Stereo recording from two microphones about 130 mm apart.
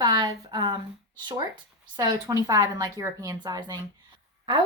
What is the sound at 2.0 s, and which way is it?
Speech, 30° right (ahead or behind).